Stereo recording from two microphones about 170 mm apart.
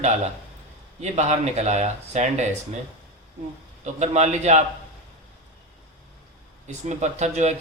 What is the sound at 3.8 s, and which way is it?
Speech, 45° right (ahead or behind).